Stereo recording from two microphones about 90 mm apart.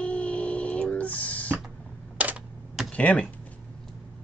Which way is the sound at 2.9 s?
15° left (ahead or behind).